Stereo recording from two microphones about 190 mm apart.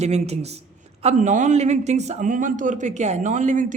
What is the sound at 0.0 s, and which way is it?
A man's voice, 35° right (ahead or behind).